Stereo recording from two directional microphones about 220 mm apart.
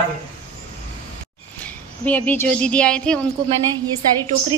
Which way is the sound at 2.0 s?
5° left (ahead or behind).